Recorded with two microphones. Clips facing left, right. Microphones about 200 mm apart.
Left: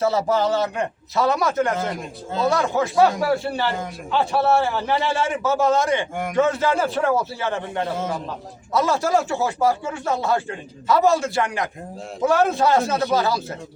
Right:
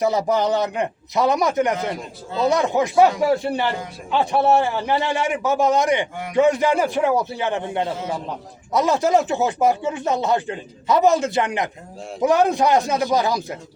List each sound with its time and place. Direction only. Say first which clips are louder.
0.0 s a man's voice: right 1 dB; 15° right (ahead or behind)